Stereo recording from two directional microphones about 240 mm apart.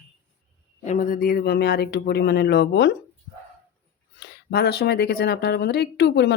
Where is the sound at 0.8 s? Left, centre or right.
Left.